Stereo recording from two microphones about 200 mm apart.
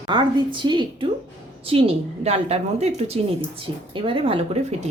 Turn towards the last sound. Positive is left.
turn(degrees=-30)  # may be behind; listen again after turning